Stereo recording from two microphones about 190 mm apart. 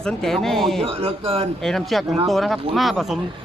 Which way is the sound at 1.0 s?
30° right (ahead or behind).